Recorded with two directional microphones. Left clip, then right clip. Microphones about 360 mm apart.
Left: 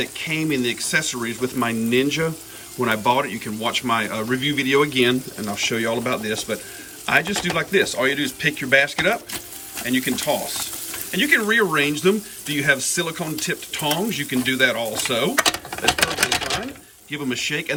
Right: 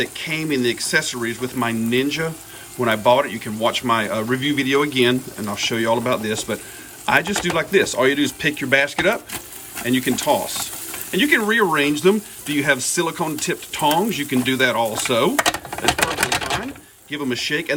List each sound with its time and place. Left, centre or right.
0.0 s speech: centre
17.1 s speech: centre